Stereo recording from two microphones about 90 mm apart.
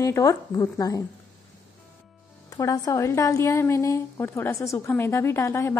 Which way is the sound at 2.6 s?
40° left (ahead or behind).